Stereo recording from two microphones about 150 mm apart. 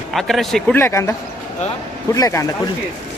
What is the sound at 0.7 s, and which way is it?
Speech, 15° left (ahead or behind).